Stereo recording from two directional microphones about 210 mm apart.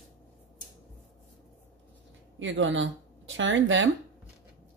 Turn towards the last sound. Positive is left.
turn(degrees=-65)  # may be behind; listen again after turning